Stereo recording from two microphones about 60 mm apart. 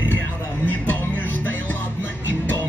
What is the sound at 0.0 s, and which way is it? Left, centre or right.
Music, left.